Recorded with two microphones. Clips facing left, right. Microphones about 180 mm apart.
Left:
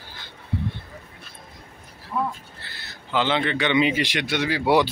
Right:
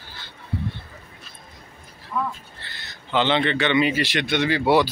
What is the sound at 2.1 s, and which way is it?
Speech, 30° left (ahead or behind).